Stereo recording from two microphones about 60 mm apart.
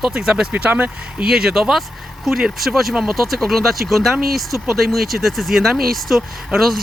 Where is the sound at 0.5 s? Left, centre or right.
Right.